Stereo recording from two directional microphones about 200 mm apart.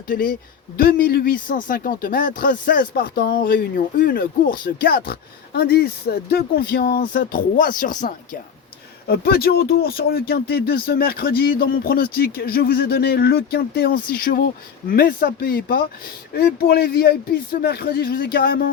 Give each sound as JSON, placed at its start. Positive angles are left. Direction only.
{"t": 0.1, "sound": "speech", "side_deg": 45}